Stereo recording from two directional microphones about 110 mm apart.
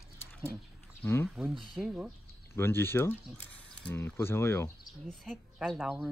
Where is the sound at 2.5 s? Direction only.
20° left (ahead or behind).